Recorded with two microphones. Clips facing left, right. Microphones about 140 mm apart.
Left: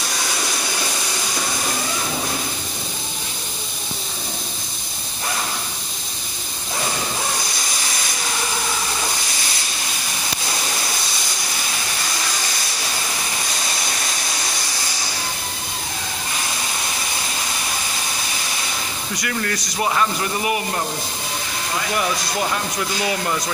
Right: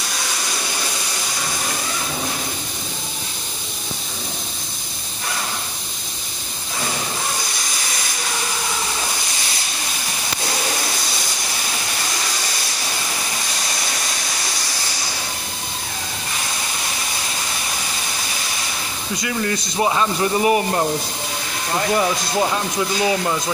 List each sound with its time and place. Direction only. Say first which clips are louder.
19.1 s speech: right 3 dB; 25° right (ahead or behind)
20.4 s speech: right 6 dB; 35° right (ahead or behind)